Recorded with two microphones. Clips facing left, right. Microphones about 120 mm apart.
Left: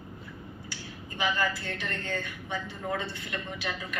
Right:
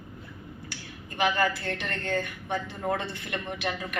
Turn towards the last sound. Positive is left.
turn(degrees=-65)  # may be behind; listen again after turning